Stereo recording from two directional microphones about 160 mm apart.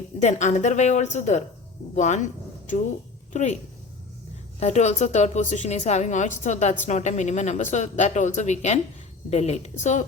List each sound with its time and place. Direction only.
0.2 s a woman's voice: 45° left (ahead or behind)
4.6 s a woman's voice: 45° left (ahead or behind)